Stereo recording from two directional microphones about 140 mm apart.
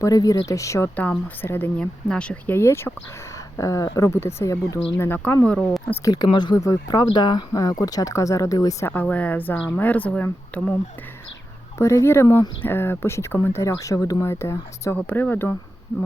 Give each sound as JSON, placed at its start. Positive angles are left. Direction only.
{"t": 0.0, "sound": "speech", "side_deg": 25}
{"t": 0.9, "sound": "speech", "side_deg": 10}
{"t": 3.3, "sound": "a sound", "side_deg": 20}
{"t": 3.8, "sound": "speech", "side_deg": 25}
{"t": 6.1, "sound": "speech", "side_deg": 30}
{"t": 8.9, "sound": "speech", "side_deg": 10}
{"t": 11.8, "sound": "speech", "side_deg": 20}